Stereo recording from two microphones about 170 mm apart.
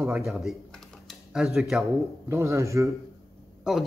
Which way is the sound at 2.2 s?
15° right (ahead or behind).